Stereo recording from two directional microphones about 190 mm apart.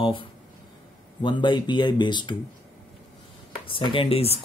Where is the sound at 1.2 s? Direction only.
25° left (ahead or behind).